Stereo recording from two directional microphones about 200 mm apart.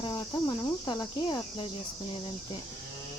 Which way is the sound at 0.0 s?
20° left (ahead or behind).